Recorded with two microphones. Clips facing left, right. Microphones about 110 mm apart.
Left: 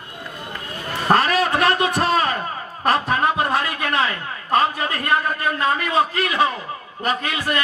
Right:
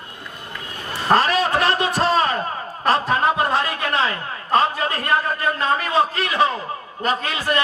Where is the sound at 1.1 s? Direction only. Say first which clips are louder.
Even; 30° right (ahead or behind).